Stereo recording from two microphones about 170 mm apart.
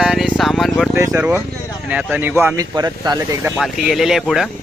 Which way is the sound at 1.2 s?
10° right (ahead or behind).